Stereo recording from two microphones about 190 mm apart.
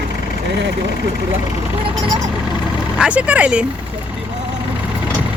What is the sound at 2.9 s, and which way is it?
Speech, 5° right (ahead or behind).